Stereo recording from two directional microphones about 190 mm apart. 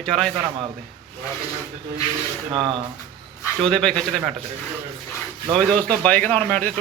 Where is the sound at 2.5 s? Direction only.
25° right (ahead or behind).